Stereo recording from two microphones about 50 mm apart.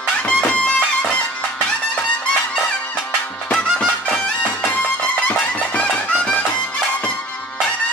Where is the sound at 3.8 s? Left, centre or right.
Left.